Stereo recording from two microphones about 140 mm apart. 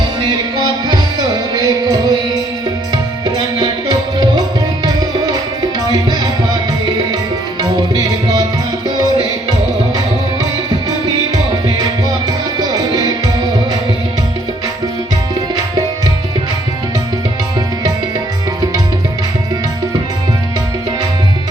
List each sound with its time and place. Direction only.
0.9 s music: 30° right (ahead or behind)
7.6 s music: 30° right (ahead or behind)
12.5 s music: 25° right (ahead or behind)